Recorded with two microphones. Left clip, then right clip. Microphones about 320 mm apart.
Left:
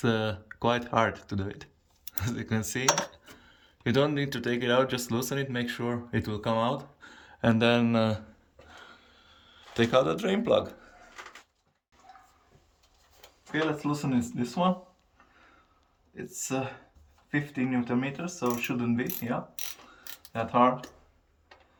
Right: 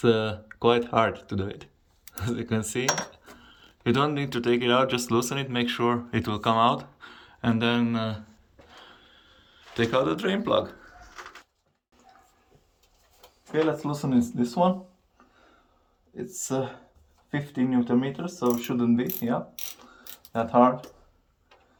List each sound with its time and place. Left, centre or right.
0.0 s speech: centre
8.8 s a sound: centre
13.5 s speech: centre
16.1 s speech: centre
20.4 s speech: right